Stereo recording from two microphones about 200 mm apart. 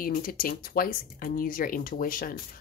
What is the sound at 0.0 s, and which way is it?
Speech, 45° left (ahead or behind).